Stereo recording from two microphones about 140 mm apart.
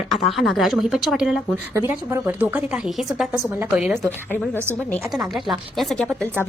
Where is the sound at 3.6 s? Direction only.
15° right (ahead or behind).